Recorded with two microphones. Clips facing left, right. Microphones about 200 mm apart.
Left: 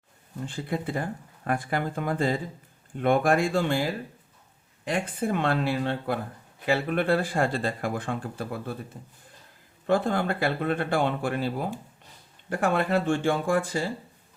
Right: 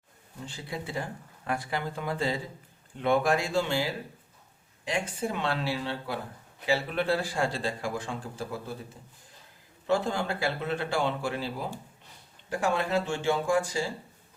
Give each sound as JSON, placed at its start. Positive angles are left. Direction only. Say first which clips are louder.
{"t": 0.4, "sound": "speech", "louder": "left 7 dB", "side_deg": 55}
{"t": 9.8, "sound": "speech", "louder": "left 3 dB", "side_deg": 55}